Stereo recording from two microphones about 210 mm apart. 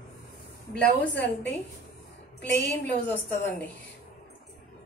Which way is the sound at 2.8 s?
10° left (ahead or behind).